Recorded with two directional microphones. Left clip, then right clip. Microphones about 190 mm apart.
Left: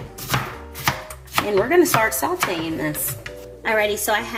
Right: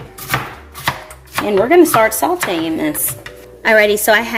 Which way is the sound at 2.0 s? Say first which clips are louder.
Right 7 dB; 45° right (ahead or behind).